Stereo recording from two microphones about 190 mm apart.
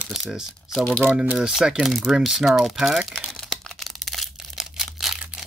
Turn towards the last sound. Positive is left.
turn(degrees=0)  # may be behind; listen again after turning